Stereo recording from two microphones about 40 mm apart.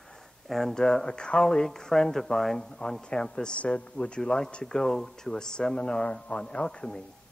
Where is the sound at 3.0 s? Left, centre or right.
Left.